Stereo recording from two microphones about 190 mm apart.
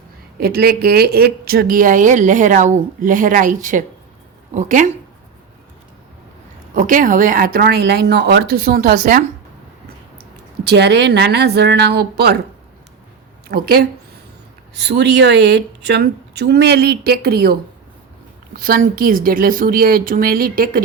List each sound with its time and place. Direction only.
0.3 s speech: 55° right (ahead or behind)
6.7 s speech: 45° right (ahead or behind)
13.5 s speech: 55° right (ahead or behind)